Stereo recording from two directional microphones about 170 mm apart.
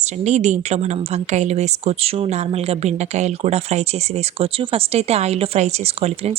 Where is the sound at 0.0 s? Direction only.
45° right (ahead or behind).